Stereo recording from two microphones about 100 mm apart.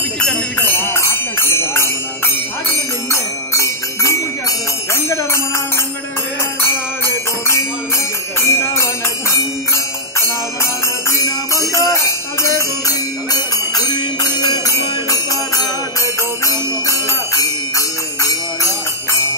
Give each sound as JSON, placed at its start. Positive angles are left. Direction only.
{"t": 0.2, "sound": "jingle bell", "side_deg": 10}
{"t": 0.7, "sound": "music", "side_deg": 25}
{"t": 6.6, "sound": "music", "side_deg": 25}
{"t": 8.4, "sound": "jingle bell", "side_deg": 30}
{"t": 10.6, "sound": "music", "side_deg": 30}
{"t": 11.7, "sound": "jingle bell", "side_deg": 30}
{"t": 12.4, "sound": "music", "side_deg": 30}